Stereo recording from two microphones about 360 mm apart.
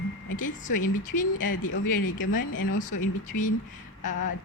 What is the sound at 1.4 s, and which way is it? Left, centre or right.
Speech, left.